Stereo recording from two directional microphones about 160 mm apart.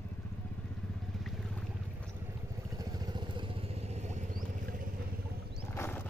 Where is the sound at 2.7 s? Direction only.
25° right (ahead or behind); by 4.9 s 60° right (ahead or behind).